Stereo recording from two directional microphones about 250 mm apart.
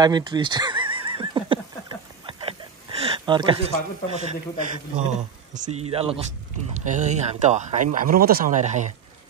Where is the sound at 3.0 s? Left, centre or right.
Centre.